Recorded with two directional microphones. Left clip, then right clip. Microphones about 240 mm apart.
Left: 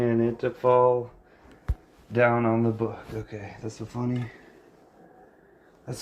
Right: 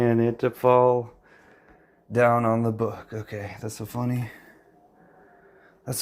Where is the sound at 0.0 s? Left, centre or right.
Right.